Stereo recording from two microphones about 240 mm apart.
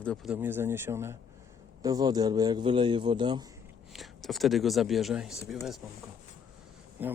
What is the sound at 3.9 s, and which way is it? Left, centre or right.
Speech, centre.